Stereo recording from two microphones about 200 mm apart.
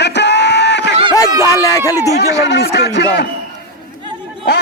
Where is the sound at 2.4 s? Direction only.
55° left (ahead or behind).